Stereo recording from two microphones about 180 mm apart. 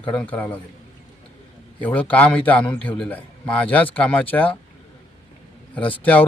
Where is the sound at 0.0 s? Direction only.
5° left (ahead or behind).